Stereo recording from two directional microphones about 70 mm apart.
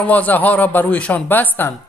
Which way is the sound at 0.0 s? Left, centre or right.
Left.